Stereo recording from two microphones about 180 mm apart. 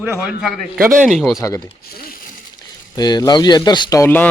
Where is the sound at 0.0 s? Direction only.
5° right (ahead or behind).